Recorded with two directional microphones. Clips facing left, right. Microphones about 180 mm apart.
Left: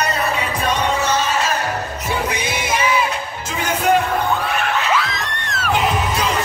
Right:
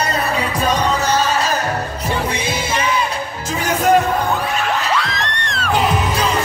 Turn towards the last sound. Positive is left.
turn(degrees=5)  # may be behind; listen again after turning